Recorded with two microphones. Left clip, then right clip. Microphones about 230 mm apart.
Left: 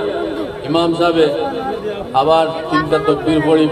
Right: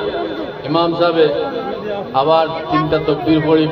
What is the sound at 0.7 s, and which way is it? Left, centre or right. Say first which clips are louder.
A man's voice: even; left.